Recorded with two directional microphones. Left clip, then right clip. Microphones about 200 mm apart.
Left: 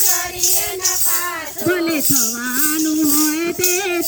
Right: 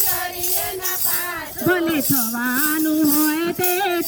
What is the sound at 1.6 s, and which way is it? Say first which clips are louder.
Music: left 1 dB; 25° right (ahead or behind).